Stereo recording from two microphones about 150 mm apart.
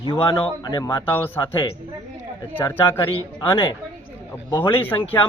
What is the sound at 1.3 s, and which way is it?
Speech, 15° left (ahead or behind).